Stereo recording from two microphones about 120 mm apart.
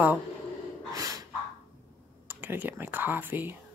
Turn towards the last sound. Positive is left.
turn(degrees=-15)  # may be behind; listen again after turning